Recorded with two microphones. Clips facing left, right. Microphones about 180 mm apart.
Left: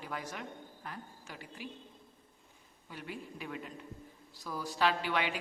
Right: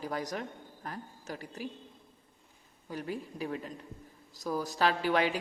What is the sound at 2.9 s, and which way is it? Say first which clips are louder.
A man's voice: right 6 dB; 40° right (ahead or behind).